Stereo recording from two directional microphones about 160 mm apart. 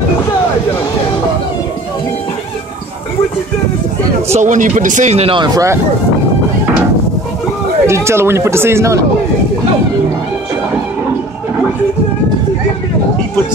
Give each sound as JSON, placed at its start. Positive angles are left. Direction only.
{"t": 4.3, "sound": "speech", "side_deg": -50}
{"t": 7.8, "sound": "speech", "side_deg": -15}